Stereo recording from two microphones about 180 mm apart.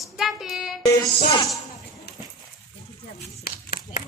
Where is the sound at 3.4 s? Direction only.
55° left (ahead or behind).